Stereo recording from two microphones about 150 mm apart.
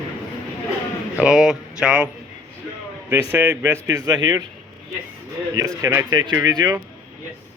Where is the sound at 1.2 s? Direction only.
5° right (ahead or behind).